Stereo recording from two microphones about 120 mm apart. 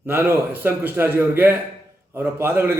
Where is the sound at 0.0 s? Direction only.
20° right (ahead or behind).